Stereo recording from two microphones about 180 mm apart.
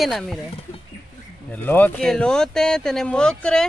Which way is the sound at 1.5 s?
10° left (ahead or behind).